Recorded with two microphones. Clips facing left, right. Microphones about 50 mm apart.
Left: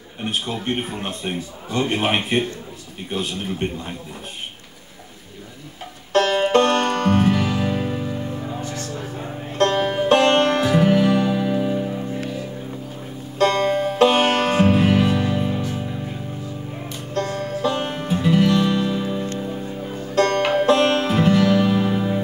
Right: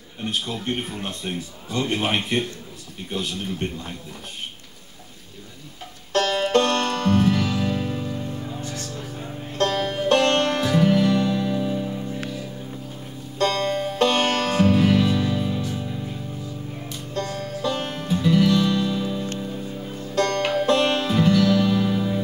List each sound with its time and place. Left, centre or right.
0.2 s a man's voice: left
6.1 s music: left
13.4 s music: centre
17.4 s music: left
17.6 s music: centre
20.6 s music: centre